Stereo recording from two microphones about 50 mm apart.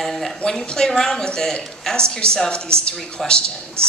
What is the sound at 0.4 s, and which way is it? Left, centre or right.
A woman's voice, centre.